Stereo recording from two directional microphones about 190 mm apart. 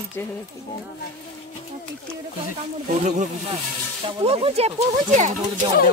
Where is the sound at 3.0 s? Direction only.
40° right (ahead or behind).